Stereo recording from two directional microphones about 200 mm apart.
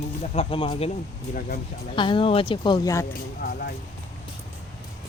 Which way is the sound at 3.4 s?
50° left (ahead or behind).